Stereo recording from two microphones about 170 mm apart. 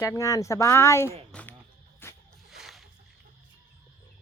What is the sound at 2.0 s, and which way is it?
Zipper, 15° left (ahead or behind).